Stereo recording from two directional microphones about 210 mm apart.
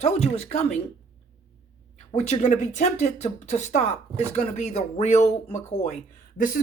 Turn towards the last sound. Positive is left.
turn(degrees=40)  # may be behind; listen again after turning